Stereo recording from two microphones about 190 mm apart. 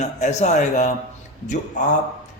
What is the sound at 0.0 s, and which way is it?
Speech, 35° left (ahead or behind).